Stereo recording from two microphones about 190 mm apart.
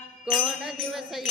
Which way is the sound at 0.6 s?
Centre (ahead or behind).